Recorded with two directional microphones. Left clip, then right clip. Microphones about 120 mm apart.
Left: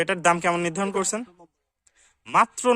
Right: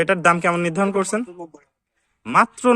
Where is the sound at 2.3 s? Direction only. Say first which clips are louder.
Right 4 dB; 45° left (ahead or behind).